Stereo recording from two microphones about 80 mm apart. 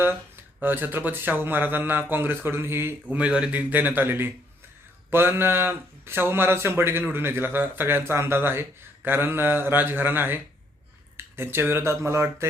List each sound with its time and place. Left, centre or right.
0.6 s speech: right
3.2 s speech: centre; by 12.5 s right